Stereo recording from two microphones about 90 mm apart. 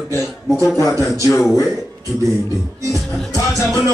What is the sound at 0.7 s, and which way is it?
Music, 35° left (ahead or behind).